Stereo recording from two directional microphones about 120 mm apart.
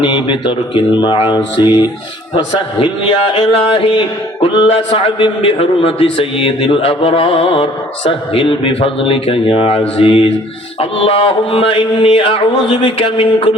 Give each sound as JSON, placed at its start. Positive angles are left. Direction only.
{"t": 0.0, "sound": "a man's voice", "side_deg": 40}